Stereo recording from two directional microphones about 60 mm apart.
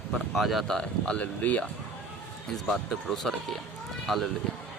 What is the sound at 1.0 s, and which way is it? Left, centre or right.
Speech, centre.